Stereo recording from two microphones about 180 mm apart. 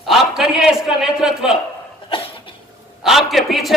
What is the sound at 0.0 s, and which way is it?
A man's voice, centre (ahead or behind).